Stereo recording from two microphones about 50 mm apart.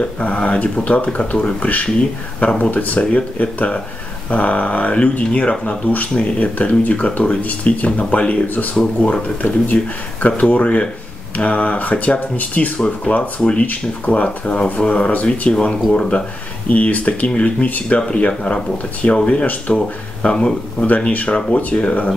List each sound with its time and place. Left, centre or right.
0.0 s speech: left
8.7 s speech: centre
16.6 s speech: left
20.8 s speech: left